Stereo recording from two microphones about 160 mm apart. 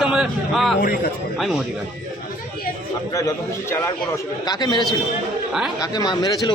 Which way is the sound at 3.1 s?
20° left (ahead or behind).